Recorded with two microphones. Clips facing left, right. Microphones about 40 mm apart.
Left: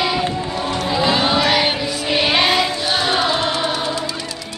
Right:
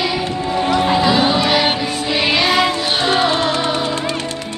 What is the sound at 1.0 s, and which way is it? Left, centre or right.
Crowd, centre.